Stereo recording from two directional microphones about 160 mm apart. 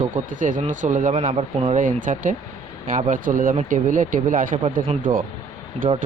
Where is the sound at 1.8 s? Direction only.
55° right (ahead or behind).